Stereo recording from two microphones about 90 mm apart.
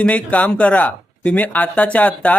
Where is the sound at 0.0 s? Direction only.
15° left (ahead or behind).